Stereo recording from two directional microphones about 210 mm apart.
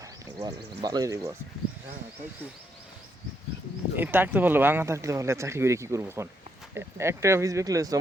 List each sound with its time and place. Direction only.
0.3 s speech: 15° right (ahead or behind)
3.9 s speech: 10° right (ahead or behind)